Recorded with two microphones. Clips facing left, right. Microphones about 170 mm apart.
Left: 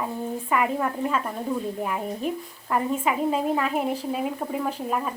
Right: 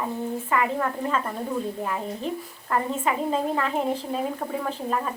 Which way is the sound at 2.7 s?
10° left (ahead or behind).